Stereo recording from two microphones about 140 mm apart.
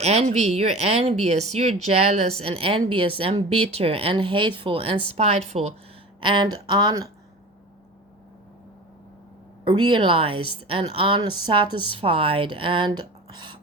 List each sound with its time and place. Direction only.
0.0 s speech: 50° right (ahead or behind)
6.1 s speech: 35° right (ahead or behind)
9.6 s speech: 35° right (ahead or behind)